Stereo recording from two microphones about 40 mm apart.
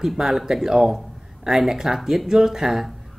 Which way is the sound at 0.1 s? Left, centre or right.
Centre.